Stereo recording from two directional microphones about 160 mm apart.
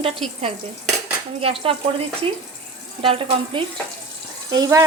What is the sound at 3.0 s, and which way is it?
Sizzle, 35° right (ahead or behind).